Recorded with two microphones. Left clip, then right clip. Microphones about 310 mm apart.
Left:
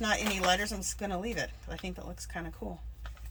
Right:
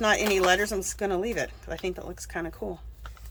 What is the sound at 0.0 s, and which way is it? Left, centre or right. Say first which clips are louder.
Speech: right 7 dB; centre.